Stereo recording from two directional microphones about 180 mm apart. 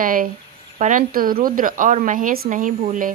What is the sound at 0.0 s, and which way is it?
A woman's voice, 50° right (ahead or behind).